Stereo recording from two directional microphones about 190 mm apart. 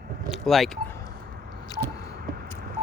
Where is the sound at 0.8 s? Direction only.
15° left (ahead or behind).